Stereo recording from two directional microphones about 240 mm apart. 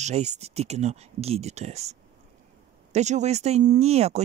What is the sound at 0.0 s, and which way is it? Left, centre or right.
Speech, right.